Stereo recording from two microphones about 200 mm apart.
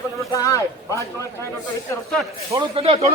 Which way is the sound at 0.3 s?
15° left (ahead or behind).